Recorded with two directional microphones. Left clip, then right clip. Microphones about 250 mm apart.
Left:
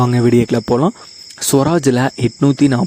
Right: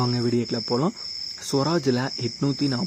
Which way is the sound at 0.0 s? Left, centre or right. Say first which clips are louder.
Left 11 dB; left.